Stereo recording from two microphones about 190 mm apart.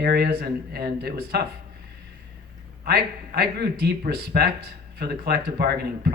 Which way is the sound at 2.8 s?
55° right (ahead or behind).